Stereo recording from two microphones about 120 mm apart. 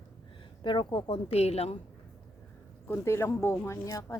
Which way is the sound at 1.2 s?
60° left (ahead or behind).